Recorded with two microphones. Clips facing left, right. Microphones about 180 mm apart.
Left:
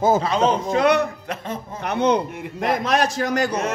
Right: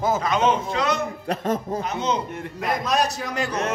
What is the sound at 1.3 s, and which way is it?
Speech, 35° right (ahead or behind).